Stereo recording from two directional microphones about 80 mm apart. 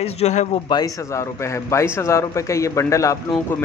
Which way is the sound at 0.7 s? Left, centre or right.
Left.